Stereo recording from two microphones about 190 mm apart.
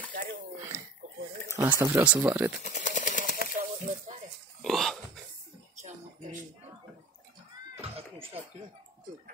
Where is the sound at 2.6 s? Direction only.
40° left (ahead or behind).